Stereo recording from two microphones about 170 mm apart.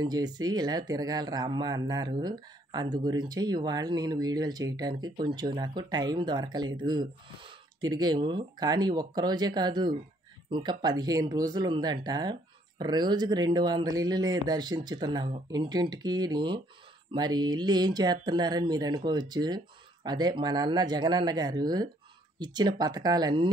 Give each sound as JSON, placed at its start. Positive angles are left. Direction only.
{"t": 0.0, "sound": "speech", "side_deg": -25}